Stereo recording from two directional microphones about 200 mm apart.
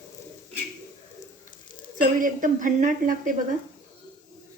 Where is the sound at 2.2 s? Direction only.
40° right (ahead or behind).